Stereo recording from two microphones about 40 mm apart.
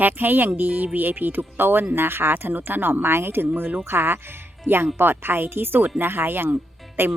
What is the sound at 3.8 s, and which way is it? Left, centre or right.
Speech, right.